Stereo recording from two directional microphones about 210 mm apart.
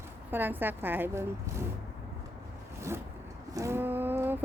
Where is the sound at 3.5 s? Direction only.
15° right (ahead or behind).